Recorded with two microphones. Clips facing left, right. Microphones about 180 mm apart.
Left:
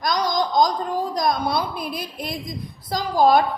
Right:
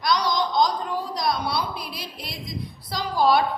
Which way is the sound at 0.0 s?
45° left (ahead or behind).